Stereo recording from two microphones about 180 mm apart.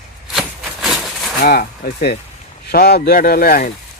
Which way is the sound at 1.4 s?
55° left (ahead or behind).